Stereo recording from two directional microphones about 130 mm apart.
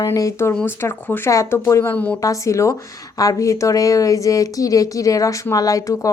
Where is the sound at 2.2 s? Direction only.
25° left (ahead or behind).